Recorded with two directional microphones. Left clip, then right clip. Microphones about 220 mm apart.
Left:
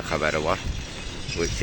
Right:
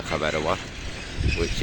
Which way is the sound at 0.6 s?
50° left (ahead or behind).